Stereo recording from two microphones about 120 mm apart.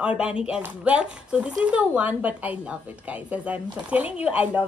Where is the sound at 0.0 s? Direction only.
10° right (ahead or behind).